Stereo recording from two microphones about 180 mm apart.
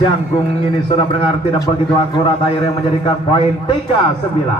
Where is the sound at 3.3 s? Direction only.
30° left (ahead or behind).